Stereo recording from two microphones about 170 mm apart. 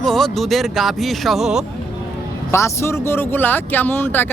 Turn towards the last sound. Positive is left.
turn(degrees=10)  # may be behind; listen again after turning